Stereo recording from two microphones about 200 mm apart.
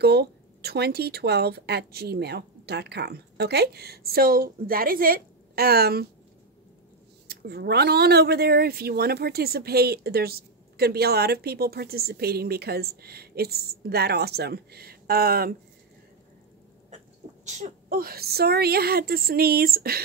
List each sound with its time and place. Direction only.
0.0 s speech: 55° right (ahead or behind)
7.2 s speech: 55° right (ahead or behind)
17.5 s speech: 35° right (ahead or behind)